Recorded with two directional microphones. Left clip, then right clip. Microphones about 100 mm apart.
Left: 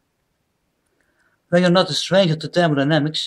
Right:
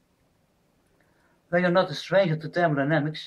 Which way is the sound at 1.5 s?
5° left (ahead or behind).